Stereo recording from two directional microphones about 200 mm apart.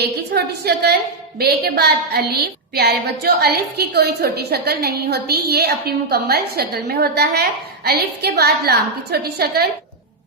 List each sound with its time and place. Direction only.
0.0 s a woman's voice: 55° right (ahead or behind)